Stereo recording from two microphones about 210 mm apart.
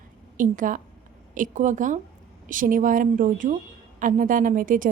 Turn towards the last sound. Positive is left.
turn(degrees=-40)  # may be behind; listen again after turning